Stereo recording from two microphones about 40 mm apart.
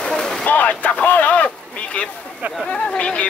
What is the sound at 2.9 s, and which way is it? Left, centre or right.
Speech, left.